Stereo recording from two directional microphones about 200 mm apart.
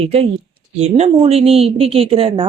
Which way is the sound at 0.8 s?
30° right (ahead or behind).